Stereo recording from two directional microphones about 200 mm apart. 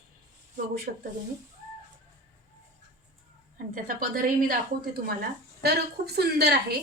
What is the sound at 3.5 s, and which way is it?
A woman's voice, 45° right (ahead or behind).